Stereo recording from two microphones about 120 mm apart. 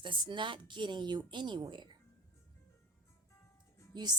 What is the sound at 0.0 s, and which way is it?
Speech, 40° right (ahead or behind).